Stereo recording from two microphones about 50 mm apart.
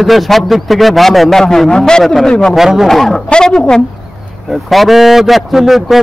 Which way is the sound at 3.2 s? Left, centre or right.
Centre.